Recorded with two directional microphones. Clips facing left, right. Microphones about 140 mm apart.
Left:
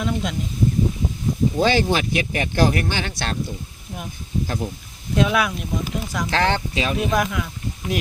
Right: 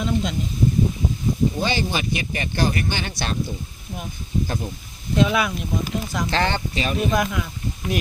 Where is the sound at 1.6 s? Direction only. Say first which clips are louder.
Left 5 dB; 90° left.